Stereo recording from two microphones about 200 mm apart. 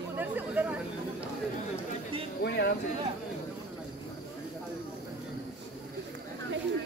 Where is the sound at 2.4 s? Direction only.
55° left (ahead or behind).